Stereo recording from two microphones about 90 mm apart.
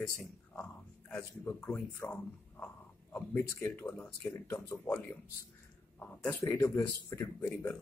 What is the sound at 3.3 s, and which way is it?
Speech, 25° left (ahead or behind).